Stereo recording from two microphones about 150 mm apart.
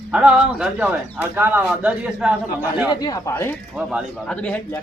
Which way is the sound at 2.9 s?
25° left (ahead or behind).